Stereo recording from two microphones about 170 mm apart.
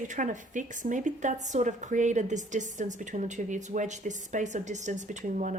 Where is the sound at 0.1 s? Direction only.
50° right (ahead or behind).